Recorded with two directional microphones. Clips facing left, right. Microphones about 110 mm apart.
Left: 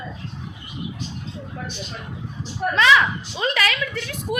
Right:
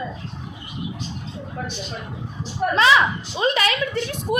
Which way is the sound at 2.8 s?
25° right (ahead or behind).